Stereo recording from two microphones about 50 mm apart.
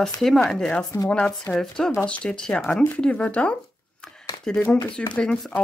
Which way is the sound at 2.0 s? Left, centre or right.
Left.